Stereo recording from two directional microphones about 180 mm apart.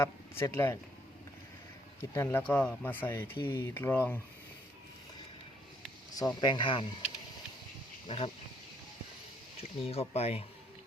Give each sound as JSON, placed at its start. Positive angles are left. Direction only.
{"t": 0.0, "sound": "speech", "side_deg": 15}
{"t": 2.0, "sound": "speech", "side_deg": 15}
{"t": 6.1, "sound": "speech", "side_deg": 25}
{"t": 8.0, "sound": "speech", "side_deg": 30}
{"t": 9.6, "sound": "speech", "side_deg": 35}